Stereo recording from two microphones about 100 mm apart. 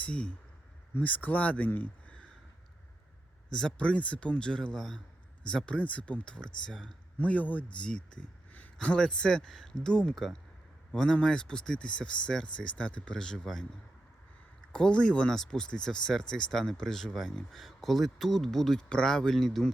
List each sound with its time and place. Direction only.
0.0 s speech: 15° left (ahead or behind)
3.5 s speech: 10° left (ahead or behind)
14.7 s speech: 10° left (ahead or behind)